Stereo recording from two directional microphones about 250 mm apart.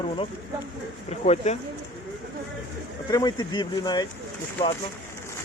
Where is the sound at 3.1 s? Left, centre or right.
Centre.